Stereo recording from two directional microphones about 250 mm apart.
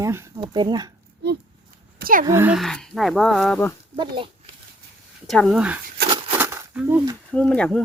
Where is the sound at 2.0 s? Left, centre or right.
Right.